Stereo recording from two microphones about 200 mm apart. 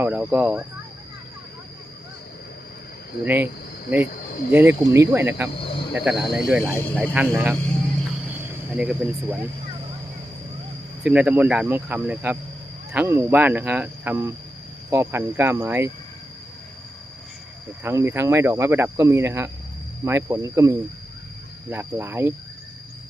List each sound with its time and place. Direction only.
0.0 s speech: 10° right (ahead or behind)
3.2 s speech: 10° right (ahead or behind)
4.5 s speech: 10° right (ahead or behind)
5.5 s cricket: 30° left (ahead or behind)
5.9 s speech: centre (ahead or behind)
6.7 s speech: 10° left (ahead or behind)
7.1 s speech: 5° right (ahead or behind)
8.7 s speech: 5° right (ahead or behind)
11.0 s speech: 5° right (ahead or behind)
17.8 s speech: 10° right (ahead or behind)